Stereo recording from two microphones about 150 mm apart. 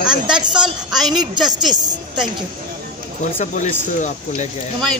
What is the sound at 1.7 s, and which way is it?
Speech, 30° right (ahead or behind).